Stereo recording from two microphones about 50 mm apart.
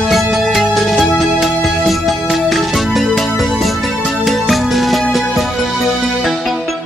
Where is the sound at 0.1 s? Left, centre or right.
Centre.